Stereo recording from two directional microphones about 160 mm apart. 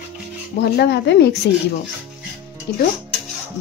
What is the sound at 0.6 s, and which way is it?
Speech, 90° left.